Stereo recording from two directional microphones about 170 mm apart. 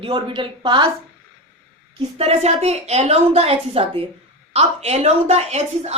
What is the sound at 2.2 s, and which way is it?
A woman's voice, 40° right (ahead or behind).